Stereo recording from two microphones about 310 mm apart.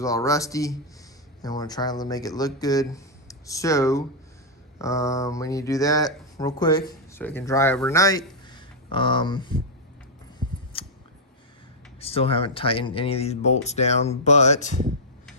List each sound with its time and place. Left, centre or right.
0.0 s speech: centre
10.7 s scissors: centre
11.9 s speech: centre